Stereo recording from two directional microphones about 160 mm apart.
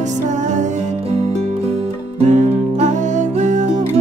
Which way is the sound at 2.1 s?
45° right (ahead or behind).